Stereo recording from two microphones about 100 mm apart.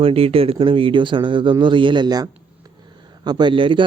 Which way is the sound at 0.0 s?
75° right (ahead or behind).